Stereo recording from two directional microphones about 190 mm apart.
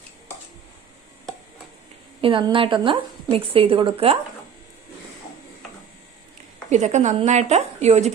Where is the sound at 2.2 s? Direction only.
25° right (ahead or behind).